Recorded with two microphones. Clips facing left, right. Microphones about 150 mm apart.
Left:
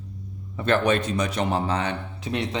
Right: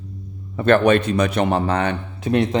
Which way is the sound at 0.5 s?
60° right (ahead or behind).